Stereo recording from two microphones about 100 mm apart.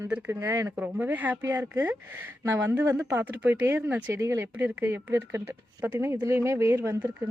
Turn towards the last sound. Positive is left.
turn(degrees=-30)  # may be behind; listen again after turning